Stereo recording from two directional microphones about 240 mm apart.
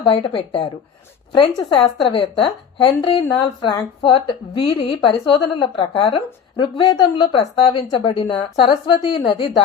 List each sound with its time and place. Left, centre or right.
0.0 s speech: left